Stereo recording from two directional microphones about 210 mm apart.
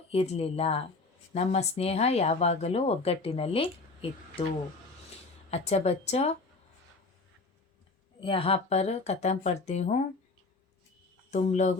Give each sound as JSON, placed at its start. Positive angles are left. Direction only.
{"t": 0.1, "sound": "speech", "side_deg": 30}
{"t": 5.5, "sound": "speech", "side_deg": 30}
{"t": 8.2, "sound": "speech", "side_deg": 25}
{"t": 11.3, "sound": "speech", "side_deg": 35}